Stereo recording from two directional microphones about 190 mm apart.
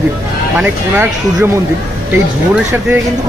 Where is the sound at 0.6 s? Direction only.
10° right (ahead or behind).